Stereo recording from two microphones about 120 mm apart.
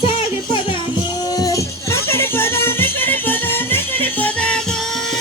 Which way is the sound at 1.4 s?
25° left (ahead or behind).